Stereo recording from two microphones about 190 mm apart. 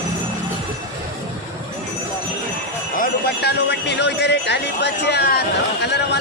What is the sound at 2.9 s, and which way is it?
Speech, 55° left (ahead or behind).